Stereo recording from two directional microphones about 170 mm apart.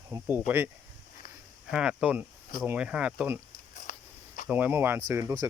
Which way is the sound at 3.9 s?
50° left (ahead or behind).